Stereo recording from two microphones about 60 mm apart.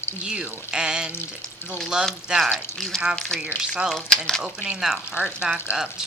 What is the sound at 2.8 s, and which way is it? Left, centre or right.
Speech, centre.